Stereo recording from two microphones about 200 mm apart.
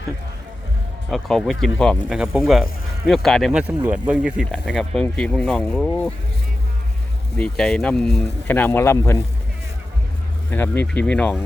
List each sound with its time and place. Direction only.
1.1 s speech: centre (ahead or behind)
7.3 s speech: 5° left (ahead or behind)
10.5 s speech: 10° left (ahead or behind)